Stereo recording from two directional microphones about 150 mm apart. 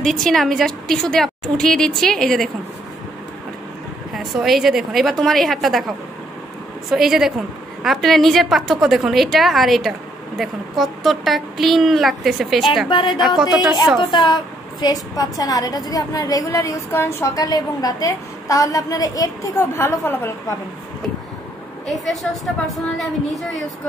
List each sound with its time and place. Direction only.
0.0 s a woman's voice: 5° left (ahead or behind)
4.1 s a woman's voice: centre (ahead or behind)
12.9 s speech: 30° left (ahead or behind)
13.4 s a woman's voice: 5° right (ahead or behind)
14.1 s a woman's voice: 30° left (ahead or behind); by 20.5 s 15° left (ahead or behind)
21.8 s a woman's voice: centre (ahead or behind)